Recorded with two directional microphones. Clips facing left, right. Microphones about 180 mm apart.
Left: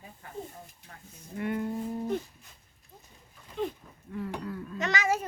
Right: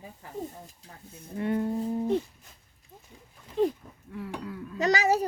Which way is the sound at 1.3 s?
30° right (ahead or behind).